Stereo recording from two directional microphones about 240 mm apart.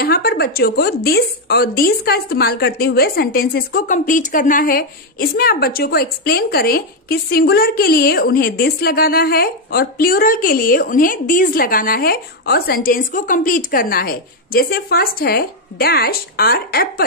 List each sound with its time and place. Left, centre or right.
0.0 s a woman's voice: left